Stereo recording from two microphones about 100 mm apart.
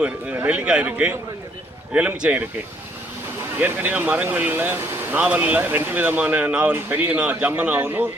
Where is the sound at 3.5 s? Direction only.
15° right (ahead or behind).